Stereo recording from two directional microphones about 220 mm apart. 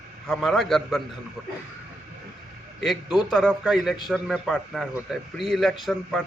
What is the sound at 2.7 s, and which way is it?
A man's voice, centre (ahead or behind).